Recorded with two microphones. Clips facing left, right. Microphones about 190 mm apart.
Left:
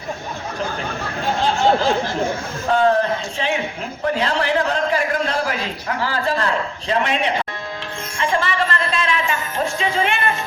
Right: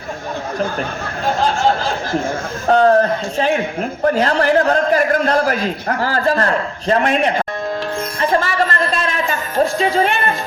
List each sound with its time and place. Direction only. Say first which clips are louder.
2.6 s a man's voice: right 4 dB; 45° right (ahead or behind)
8.2 s music: right 3 dB; 40° right (ahead or behind)